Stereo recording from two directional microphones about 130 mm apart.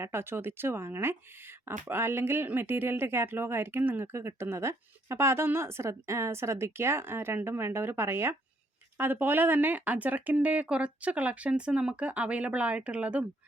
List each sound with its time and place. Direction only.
0.0 s speech: 20° right (ahead or behind)